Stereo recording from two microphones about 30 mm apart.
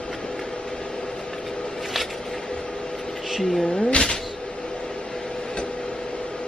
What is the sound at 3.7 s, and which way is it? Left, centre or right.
Speech, left.